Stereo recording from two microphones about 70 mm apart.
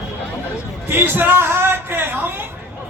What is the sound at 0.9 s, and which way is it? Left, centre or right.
A man's voice, right.